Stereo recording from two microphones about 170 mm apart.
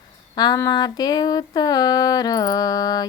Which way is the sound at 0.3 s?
20° left (ahead or behind).